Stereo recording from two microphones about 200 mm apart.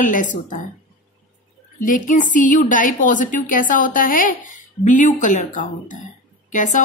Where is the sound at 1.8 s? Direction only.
40° left (ahead or behind).